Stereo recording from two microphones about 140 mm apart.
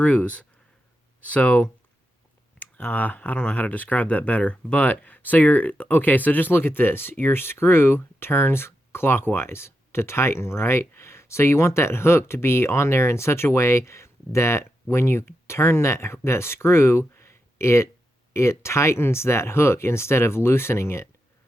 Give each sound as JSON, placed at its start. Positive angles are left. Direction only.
{"t": 0.0, "sound": "speech", "side_deg": 10}